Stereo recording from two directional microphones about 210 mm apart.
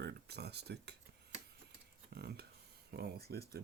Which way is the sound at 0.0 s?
50° right (ahead or behind).